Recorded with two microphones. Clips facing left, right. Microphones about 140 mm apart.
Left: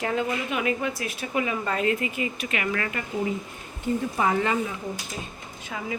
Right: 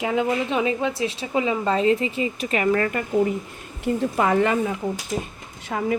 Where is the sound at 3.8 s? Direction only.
70° right (ahead or behind).